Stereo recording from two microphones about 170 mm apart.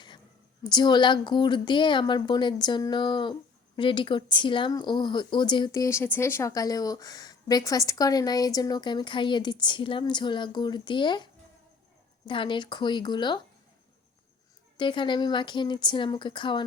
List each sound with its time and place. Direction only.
0.6 s speech: 25° left (ahead or behind)
14.8 s speech: 30° left (ahead or behind)